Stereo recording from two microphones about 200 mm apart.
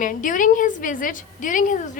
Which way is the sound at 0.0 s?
40° left (ahead or behind).